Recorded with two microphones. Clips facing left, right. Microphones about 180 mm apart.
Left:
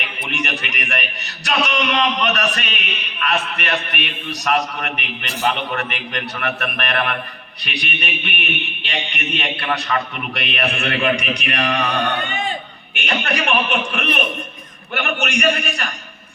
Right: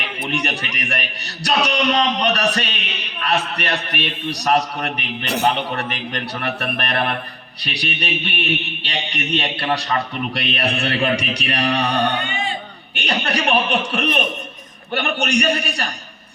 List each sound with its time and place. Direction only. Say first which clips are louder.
0.3 s a man's voice: right 2 dB; 35° right (ahead or behind)